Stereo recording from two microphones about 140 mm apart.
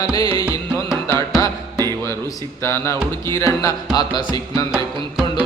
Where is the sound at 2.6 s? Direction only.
20° left (ahead or behind).